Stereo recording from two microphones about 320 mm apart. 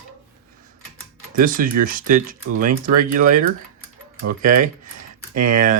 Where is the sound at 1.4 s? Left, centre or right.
Right.